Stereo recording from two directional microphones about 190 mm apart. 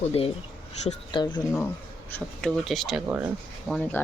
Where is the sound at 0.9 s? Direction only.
25° left (ahead or behind).